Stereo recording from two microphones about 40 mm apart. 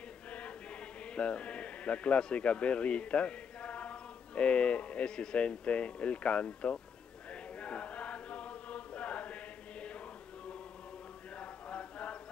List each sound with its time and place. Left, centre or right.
1.1 s a man's voice: left
7.5 s chant: left
11.3 s chant: left